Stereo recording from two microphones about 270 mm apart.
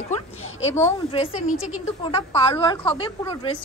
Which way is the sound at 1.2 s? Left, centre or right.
Left.